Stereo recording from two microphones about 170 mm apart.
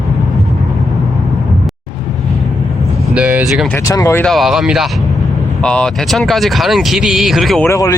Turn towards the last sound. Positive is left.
turn(degrees=20)  # may be behind; listen again after turning